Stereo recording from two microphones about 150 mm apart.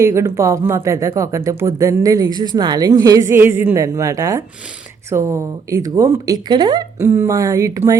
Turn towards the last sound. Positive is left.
turn(degrees=-20)  # may be behind; listen again after turning